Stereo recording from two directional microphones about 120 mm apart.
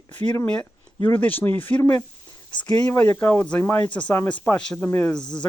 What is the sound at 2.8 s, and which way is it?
Speech, 15° left (ahead or behind).